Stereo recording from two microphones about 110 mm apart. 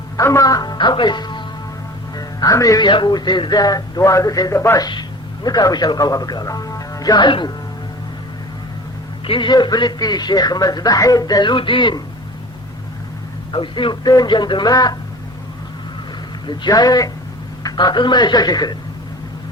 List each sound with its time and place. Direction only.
0.2 s a man's voice: 25° left (ahead or behind); by 1.5 s 45° left (ahead or behind)
2.1 s a man's voice: 35° left (ahead or behind)
4.9 s speech: 40° left (ahead or behind)
9.2 s a man's voice: 50° left (ahead or behind)
13.5 s a man's voice: 45° left (ahead or behind)
16.5 s a man's voice: 40° left (ahead or behind)